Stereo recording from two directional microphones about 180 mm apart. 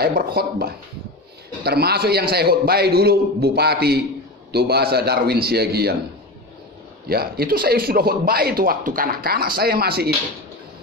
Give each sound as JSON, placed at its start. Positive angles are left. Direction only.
{"t": 0.0, "sound": "speech", "side_deg": -60}
{"t": 7.1, "sound": "speech", "side_deg": -60}